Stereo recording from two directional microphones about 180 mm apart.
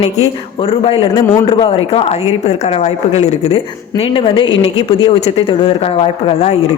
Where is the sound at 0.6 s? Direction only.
30° left (ahead or behind).